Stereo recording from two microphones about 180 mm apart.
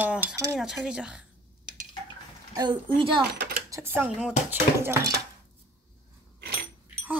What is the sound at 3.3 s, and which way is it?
Typing, 55° right (ahead or behind).